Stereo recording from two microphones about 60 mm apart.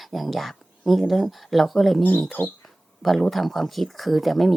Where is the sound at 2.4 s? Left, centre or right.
Left.